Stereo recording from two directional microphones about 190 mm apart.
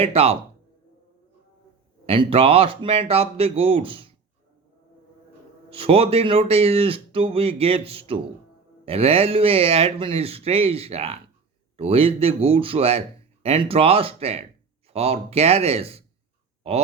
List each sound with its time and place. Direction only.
0.0 s speech: 30° right (ahead or behind)
2.0 s speech: 30° right (ahead or behind)
5.7 s speech: 30° right (ahead or behind)